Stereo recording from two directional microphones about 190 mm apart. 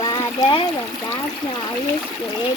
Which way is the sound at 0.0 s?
20° left (ahead or behind).